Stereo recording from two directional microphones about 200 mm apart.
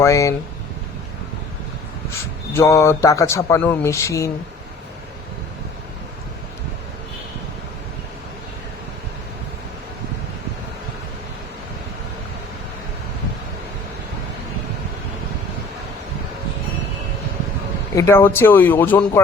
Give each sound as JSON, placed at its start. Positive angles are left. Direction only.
{"t": 0.0, "sound": "speech", "side_deg": 15}
{"t": 2.5, "sound": "speech", "side_deg": 15}
{"t": 17.9, "sound": "speech", "side_deg": 15}